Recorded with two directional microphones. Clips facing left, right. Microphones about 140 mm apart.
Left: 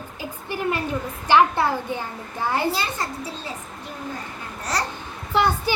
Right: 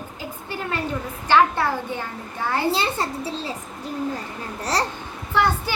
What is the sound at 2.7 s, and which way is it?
Speech, 30° right (ahead or behind).